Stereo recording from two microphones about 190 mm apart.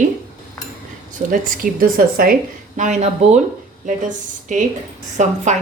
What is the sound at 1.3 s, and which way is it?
A woman's voice, 45° right (ahead or behind).